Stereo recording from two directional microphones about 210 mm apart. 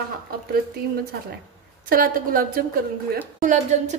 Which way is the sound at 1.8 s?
45° right (ahead or behind).